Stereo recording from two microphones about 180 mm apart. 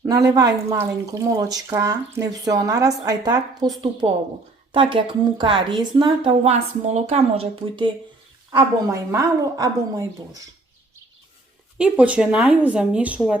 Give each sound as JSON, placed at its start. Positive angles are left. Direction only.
{"t": 0.3, "sound": "speech", "side_deg": -20}
{"t": 8.5, "sound": "speech", "side_deg": -20}
{"t": 11.8, "sound": "speech", "side_deg": -5}